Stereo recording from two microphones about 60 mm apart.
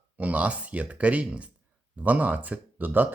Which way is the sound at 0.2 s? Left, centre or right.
Right.